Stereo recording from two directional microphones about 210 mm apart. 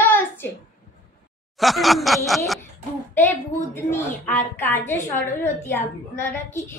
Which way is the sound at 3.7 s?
10° left (ahead or behind).